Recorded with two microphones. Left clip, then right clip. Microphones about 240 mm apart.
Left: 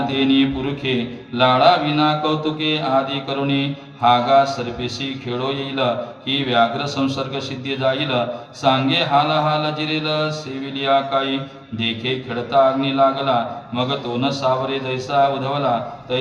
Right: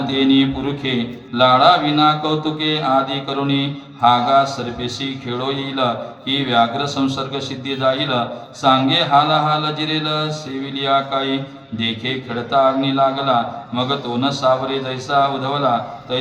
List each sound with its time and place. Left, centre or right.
0.1 s a man's voice: right